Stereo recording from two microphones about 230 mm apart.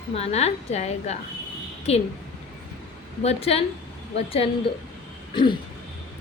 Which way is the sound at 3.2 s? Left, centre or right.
Left.